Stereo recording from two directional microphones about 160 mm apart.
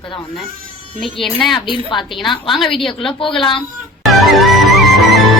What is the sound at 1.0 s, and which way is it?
Speech, centre (ahead or behind).